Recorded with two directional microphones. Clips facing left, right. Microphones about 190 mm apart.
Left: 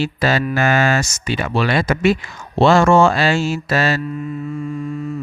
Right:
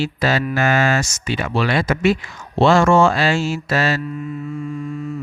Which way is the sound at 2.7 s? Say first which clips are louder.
Left 1 dB; 40° left (ahead or behind).